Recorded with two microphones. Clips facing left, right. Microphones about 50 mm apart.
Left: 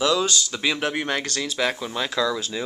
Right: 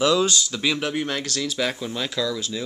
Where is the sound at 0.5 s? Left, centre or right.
Centre.